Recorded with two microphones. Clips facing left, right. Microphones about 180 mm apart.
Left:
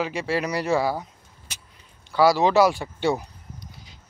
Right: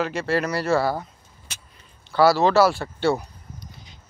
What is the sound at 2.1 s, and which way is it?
Speech, 15° left (ahead or behind).